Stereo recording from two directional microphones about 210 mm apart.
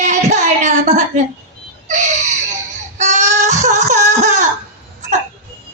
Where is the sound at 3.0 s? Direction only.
35° right (ahead or behind).